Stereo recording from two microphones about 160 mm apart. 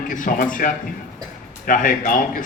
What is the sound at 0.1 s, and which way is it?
A man's voice, 55° left (ahead or behind).